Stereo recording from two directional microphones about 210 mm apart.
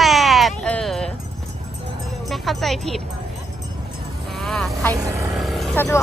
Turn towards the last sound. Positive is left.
turn(degrees=10)  # may be behind; listen again after turning